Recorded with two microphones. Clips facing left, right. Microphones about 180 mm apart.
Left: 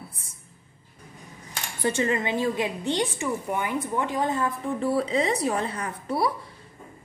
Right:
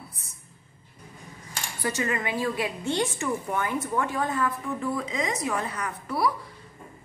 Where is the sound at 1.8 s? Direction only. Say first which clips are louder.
Left 4 dB; 30° left (ahead or behind).